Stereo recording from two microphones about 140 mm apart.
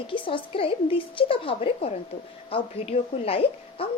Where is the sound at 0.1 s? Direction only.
40° left (ahead or behind).